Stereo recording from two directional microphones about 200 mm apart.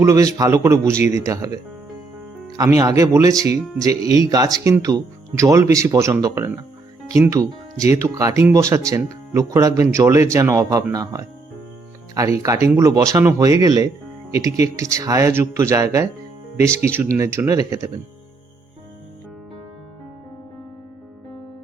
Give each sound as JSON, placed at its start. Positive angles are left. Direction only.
{"t": 0.0, "sound": "speech", "side_deg": -15}
{"t": 2.7, "sound": "speech", "side_deg": -15}